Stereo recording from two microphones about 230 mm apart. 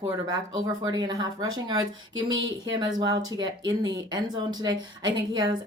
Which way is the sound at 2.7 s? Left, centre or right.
Centre.